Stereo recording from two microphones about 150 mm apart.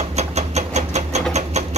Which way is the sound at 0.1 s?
45° right (ahead or behind).